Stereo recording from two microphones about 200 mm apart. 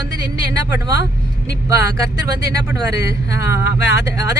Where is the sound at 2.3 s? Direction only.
15° right (ahead or behind).